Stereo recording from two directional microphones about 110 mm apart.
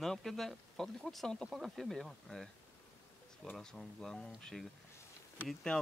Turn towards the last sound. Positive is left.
turn(degrees=5)  # may be behind; listen again after turning